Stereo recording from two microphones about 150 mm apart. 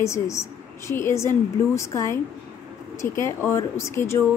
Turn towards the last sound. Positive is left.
turn(degrees=15)  # may be behind; listen again after turning